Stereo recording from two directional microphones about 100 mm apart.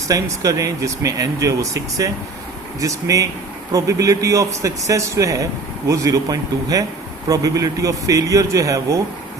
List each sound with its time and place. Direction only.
0.1 s speech: 35° right (ahead or behind)